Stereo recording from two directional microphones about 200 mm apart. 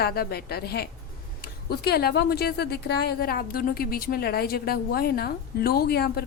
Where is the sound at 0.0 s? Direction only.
50° left (ahead or behind).